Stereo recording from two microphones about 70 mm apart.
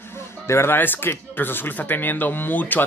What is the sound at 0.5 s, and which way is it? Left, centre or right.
Speech, left.